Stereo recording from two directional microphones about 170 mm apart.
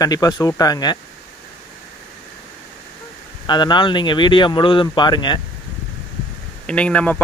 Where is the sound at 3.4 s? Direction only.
25° left (ahead or behind).